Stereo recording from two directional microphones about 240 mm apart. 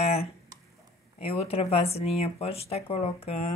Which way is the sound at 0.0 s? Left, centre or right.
Left.